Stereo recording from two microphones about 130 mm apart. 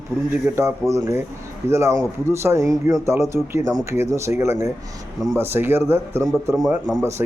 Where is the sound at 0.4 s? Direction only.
20° right (ahead or behind).